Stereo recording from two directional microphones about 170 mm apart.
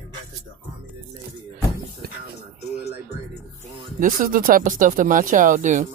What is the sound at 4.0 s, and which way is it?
Speech, 55° right (ahead or behind).